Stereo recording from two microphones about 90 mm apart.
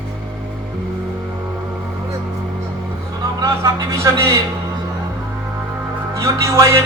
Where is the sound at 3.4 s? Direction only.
35° right (ahead or behind).